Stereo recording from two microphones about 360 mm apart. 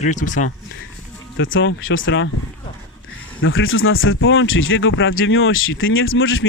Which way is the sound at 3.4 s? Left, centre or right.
Left.